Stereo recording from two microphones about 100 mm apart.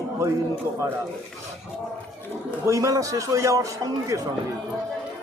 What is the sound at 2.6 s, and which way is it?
A man's voice, 30° right (ahead or behind).